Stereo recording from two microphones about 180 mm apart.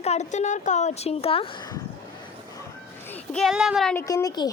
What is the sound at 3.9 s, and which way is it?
Speech, 15° left (ahead or behind).